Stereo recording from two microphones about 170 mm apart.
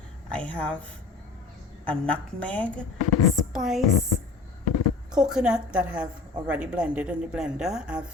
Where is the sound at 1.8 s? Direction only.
5° left (ahead or behind).